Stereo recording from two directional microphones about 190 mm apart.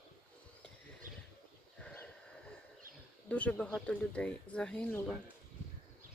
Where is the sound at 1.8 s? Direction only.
10° left (ahead or behind).